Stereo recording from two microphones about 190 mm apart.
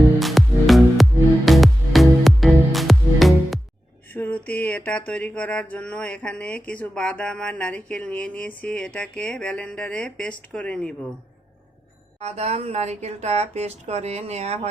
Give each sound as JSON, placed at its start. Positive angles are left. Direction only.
{"t": 0.2, "sound": "music", "side_deg": 0}
{"t": 4.1, "sound": "a sound", "side_deg": 10}
{"t": 12.2, "sound": "speech", "side_deg": -35}